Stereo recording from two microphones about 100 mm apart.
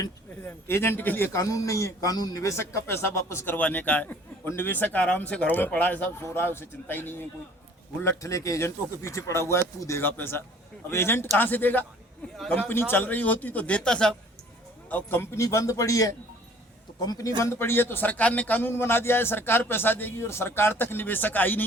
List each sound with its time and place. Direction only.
0.4 s a man's voice: 25° left (ahead or behind)
1.3 s a man's voice: 35° left (ahead or behind)
8.0 s a man's voice: 35° left (ahead or behind); by 14.2 s 10° left (ahead or behind)
14.8 s a man's voice: 20° left (ahead or behind); by 17.3 s 35° left (ahead or behind)
17.4 s a man's voice: 25° left (ahead or behind)